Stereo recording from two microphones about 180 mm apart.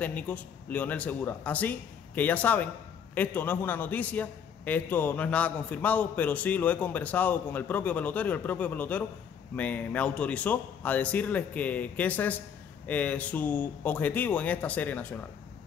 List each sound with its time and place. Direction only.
0.0 s a man's voice: 10° left (ahead or behind)